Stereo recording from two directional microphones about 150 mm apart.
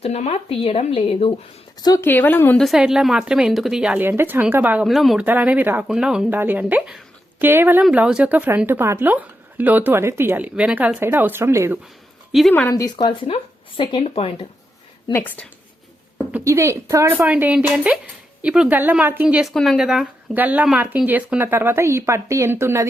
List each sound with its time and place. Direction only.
0.0 s speech: 45° left (ahead or behind)
1.8 s speech: 25° left (ahead or behind)
2.0 s speech: 15° left (ahead or behind)
2.6 s speech: centre (ahead or behind)
5.2 s speech: 10° right (ahead or behind)
12.3 s speech: centre (ahead or behind)
12.7 s speech: 25° left (ahead or behind)
15.1 s speech: 10° left (ahead or behind)
16.4 s speech: 20° right (ahead or behind)